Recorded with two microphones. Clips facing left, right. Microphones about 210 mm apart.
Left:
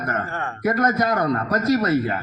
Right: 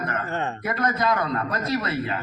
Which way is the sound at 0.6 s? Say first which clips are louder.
Left 6 dB; 45° left (ahead or behind).